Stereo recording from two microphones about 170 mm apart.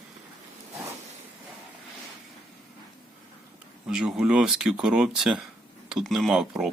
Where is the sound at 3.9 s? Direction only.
5° right (ahead or behind).